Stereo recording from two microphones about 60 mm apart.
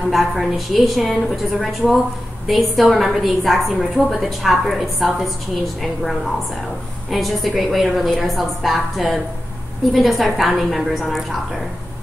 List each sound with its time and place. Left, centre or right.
0.1 s a woman's voice: centre